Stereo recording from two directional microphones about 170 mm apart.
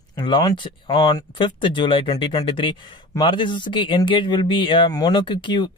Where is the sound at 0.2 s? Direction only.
25° left (ahead or behind).